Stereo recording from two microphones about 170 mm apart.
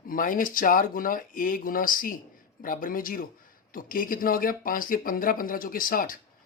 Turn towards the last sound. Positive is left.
turn(degrees=55)  # may be behind; listen again after turning